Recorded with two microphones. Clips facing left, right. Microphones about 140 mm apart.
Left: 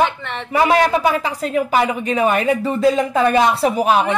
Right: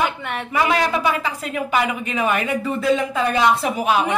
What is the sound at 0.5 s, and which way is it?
Speech, 35° left (ahead or behind).